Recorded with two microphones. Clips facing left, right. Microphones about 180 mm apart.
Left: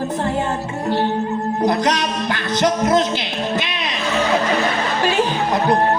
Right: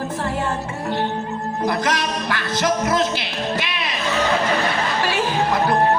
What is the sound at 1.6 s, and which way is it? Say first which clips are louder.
Music: left 3 dB; 20° left (ahead or behind).